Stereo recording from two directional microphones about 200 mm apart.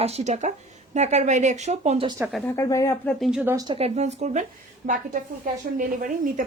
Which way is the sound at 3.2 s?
5° right (ahead or behind).